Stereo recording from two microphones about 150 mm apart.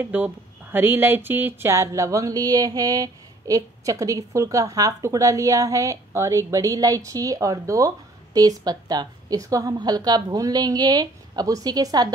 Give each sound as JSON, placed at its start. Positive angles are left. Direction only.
{"t": 0.0, "sound": "speech", "side_deg": -10}